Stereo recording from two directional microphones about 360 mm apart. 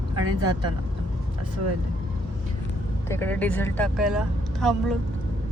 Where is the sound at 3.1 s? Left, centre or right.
Centre.